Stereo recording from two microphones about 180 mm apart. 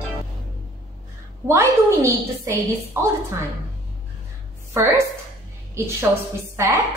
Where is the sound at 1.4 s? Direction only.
15° right (ahead or behind).